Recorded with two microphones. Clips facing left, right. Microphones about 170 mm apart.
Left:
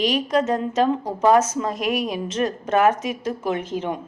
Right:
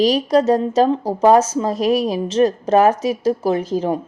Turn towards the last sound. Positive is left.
turn(degrees=-35)  # may be behind; listen again after turning